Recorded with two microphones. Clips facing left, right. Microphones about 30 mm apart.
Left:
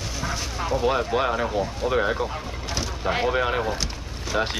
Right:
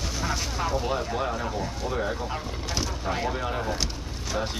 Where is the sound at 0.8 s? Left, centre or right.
Left.